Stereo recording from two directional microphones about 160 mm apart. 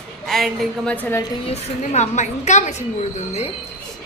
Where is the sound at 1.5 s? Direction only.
45° left (ahead or behind).